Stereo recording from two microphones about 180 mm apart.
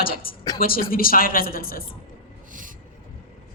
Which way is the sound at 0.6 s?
55° left (ahead or behind).